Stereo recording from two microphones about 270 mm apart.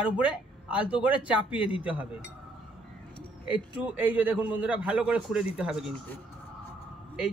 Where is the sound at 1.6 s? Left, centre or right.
Centre.